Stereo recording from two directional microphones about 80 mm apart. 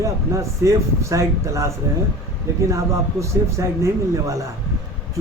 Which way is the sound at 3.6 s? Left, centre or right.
Right.